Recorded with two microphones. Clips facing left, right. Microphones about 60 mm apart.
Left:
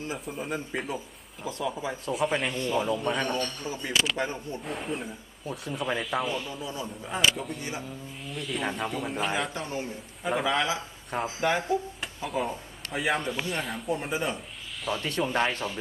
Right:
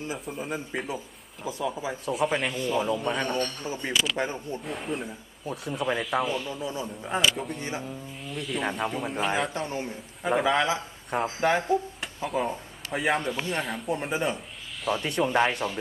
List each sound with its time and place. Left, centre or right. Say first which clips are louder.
0.1 s speech: even; centre
3.6 s speech: right 2 dB; right
3.9 s speech: even; centre
4.2 s speech: right 1 dB; centre
4.6 s speech: even; centre
11.2 s speech: right 2 dB; right
12.3 s speech: right 2 dB; centre
14.9 s speech: right 3 dB; centre